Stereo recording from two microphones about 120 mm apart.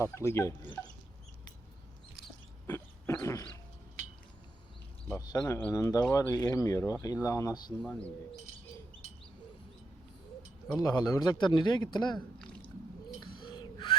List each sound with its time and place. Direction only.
0.0 s speech: 25° left (ahead or behind)
2.6 s a sound: 20° left (ahead or behind)
5.1 s speech: 30° left (ahead or behind)
5.5 s speech: 15° left (ahead or behind)
5.7 s speech: 30° left (ahead or behind)
7.8 s speech: 10° left (ahead or behind)
10.8 s a man's voice: 35° left (ahead or behind)
13.1 s gasp: 40° left (ahead or behind)